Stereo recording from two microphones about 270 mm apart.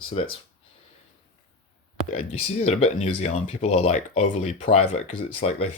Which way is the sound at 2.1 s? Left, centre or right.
Left.